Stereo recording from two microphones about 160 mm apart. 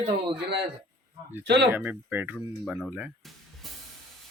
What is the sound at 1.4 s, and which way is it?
Speech, 90° right.